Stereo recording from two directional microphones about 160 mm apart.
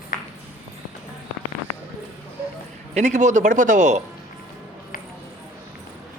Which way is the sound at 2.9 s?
45° right (ahead or behind).